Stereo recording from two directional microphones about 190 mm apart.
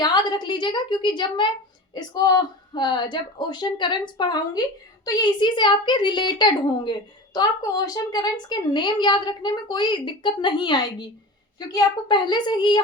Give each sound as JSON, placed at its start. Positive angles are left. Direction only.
{"t": 0.0, "sound": "a woman's voice", "side_deg": 25}